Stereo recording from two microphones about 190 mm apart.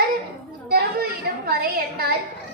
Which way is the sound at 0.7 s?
55° right (ahead or behind).